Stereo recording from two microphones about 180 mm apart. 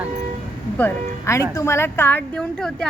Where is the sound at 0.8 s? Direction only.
15° left (ahead or behind).